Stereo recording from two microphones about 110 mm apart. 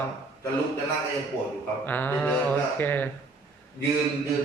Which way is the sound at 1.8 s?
15° left (ahead or behind).